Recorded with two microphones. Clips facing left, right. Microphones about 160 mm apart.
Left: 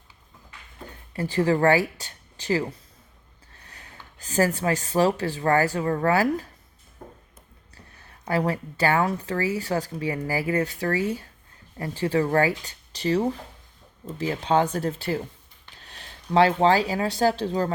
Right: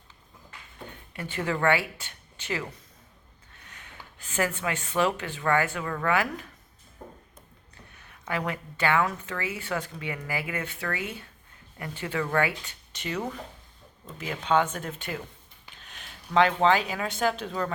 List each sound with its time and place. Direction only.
0.9 s speech: 35° left (ahead or behind)
7.9 s a woman's voice: 35° left (ahead or behind)